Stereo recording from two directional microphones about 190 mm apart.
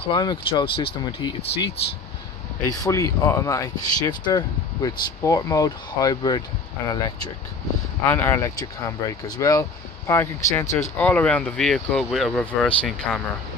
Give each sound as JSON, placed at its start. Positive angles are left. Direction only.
{"t": 0.1, "sound": "speech", "side_deg": 25}
{"t": 2.7, "sound": "speech", "side_deg": 20}